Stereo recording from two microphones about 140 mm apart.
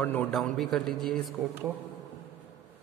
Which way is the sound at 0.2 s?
Centre (ahead or behind).